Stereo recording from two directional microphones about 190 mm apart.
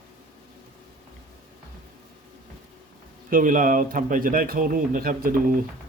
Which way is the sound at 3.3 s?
45° right (ahead or behind).